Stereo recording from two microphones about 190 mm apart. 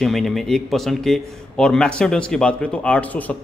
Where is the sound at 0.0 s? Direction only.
Centre (ahead or behind).